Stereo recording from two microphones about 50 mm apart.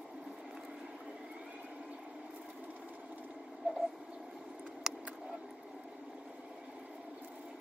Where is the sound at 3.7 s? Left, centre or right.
Right.